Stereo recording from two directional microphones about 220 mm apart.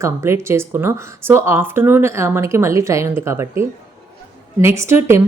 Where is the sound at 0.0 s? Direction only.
10° right (ahead or behind).